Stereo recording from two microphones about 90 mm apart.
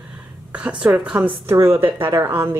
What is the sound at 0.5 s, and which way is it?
A woman's voice, 10° right (ahead or behind).